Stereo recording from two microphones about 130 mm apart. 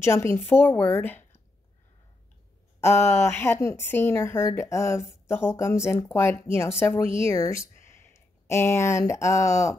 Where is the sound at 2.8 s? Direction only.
20° left (ahead or behind).